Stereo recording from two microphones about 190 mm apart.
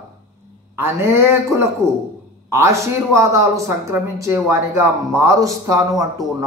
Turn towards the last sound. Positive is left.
turn(degrees=-15)  # may be behind; listen again after turning